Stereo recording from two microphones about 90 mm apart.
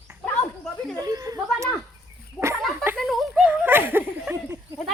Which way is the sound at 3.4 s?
20° right (ahead or behind).